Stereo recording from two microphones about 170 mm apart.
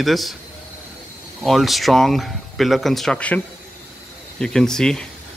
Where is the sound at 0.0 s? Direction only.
Centre (ahead or behind).